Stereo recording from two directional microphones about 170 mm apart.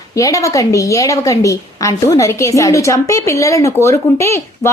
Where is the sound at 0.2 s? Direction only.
20° left (ahead or behind).